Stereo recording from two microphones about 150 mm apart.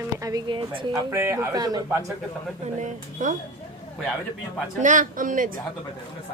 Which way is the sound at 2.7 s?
55° right (ahead or behind).